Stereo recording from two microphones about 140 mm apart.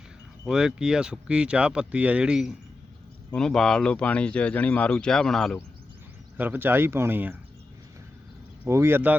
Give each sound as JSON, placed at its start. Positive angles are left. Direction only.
{"t": 0.4, "sound": "speech", "side_deg": -5}
{"t": 3.3, "sound": "speech", "side_deg": 5}
{"t": 6.3, "sound": "speech", "side_deg": -15}
{"t": 8.6, "sound": "speech", "side_deg": -20}